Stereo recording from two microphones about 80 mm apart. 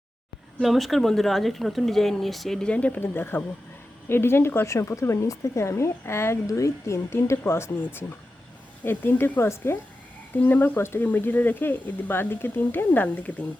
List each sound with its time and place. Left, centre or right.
0.6 s speech: centre; by 13.3 s left